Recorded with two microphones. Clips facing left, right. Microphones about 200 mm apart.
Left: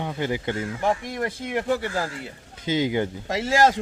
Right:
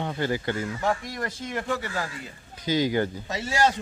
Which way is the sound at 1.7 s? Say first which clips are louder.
Left 5 dB; 35° left (ahead or behind).